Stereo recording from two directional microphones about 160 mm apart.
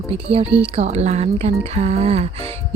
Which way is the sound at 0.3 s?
40° right (ahead or behind).